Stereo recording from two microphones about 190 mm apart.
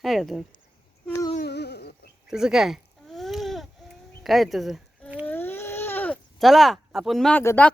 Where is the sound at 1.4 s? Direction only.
60° left (ahead or behind).